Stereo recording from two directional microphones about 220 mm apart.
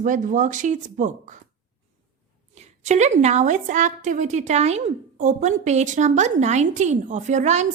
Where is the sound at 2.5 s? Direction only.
30° right (ahead or behind).